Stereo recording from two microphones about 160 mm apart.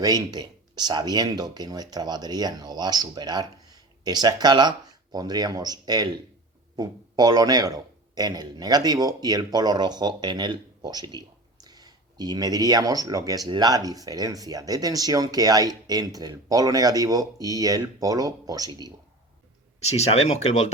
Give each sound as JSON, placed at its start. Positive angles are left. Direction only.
{"t": 0.0, "sound": "a man's voice", "side_deg": -25}
{"t": 19.8, "sound": "speech", "side_deg": 40}